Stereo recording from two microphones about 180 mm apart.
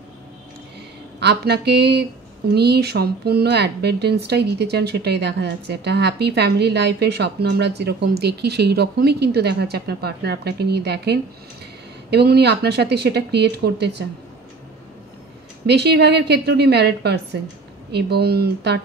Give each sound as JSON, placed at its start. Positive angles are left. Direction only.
{"t": 1.2, "sound": "speech", "side_deg": -65}
{"t": 15.6, "sound": "speech", "side_deg": -65}